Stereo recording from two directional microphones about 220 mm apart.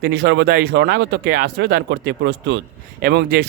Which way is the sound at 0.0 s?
50° right (ahead or behind).